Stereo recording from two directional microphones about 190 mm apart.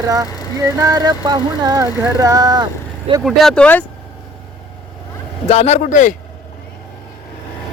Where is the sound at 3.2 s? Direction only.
Centre (ahead or behind).